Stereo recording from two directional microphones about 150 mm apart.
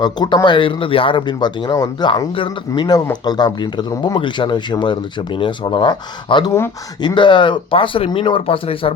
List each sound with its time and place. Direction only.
0.0 s speech: 30° left (ahead or behind)